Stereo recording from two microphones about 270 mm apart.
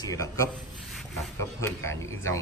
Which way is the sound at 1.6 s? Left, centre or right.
Centre.